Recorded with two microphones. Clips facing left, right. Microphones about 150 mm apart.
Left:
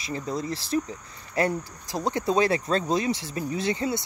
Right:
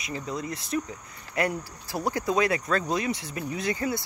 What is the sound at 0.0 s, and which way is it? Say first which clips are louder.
Speech: left 3 dB; 35° left (ahead or behind).